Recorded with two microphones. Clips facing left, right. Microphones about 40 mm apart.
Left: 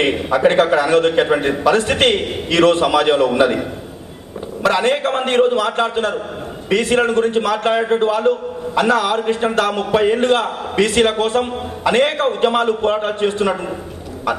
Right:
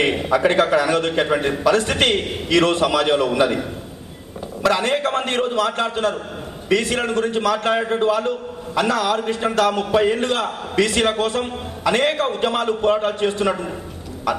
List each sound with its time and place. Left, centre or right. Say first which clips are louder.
0.7 s a man's voice: left 4 dB; left
1.1 s a man's voice: left 4 dB; left
4.6 s a man's voice: left 3 dB; left